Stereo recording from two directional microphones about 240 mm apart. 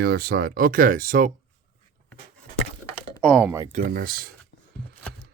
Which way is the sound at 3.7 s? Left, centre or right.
Right.